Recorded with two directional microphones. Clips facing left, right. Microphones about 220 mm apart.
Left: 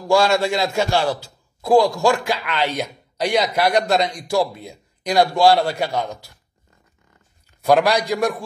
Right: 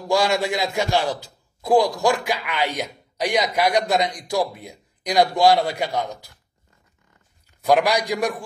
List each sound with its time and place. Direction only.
0.1 s a man's voice: 15° right (ahead or behind)
7.6 s a man's voice: 15° right (ahead or behind)